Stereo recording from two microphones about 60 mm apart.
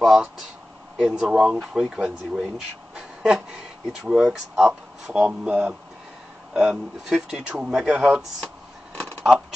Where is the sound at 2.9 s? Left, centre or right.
Centre.